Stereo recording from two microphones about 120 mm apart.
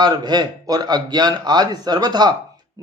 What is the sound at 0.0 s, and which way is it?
Speech, 35° right (ahead or behind).